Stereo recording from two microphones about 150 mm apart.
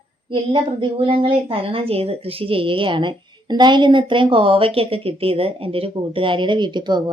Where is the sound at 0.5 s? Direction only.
35° right (ahead or behind).